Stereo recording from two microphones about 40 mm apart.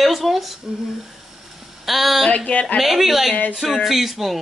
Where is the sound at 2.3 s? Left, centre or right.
Left.